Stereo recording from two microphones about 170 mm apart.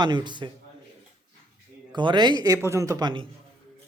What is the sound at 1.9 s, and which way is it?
Speech, 25° right (ahead or behind).